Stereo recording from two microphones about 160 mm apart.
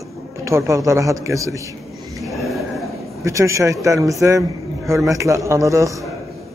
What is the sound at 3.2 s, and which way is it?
A man's voice, 20° right (ahead or behind).